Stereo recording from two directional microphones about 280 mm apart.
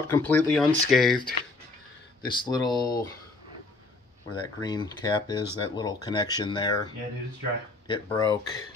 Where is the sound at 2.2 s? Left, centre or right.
Centre.